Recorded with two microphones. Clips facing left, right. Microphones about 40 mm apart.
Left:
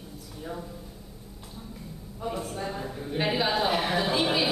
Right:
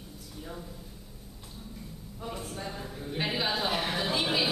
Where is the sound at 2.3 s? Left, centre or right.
Centre.